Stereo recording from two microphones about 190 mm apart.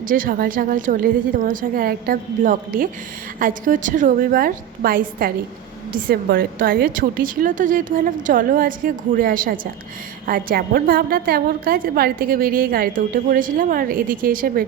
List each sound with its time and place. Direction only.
0.0 s a woman's voice: 45° right (ahead or behind)